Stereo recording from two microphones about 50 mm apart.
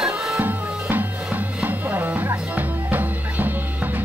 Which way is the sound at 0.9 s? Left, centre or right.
Right.